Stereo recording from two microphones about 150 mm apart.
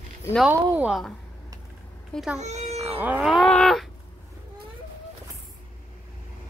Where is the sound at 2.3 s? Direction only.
50° right (ahead or behind).